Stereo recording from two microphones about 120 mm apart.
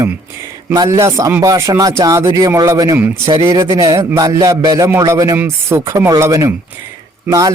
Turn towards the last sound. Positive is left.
turn(degrees=-30)  # may be behind; listen again after turning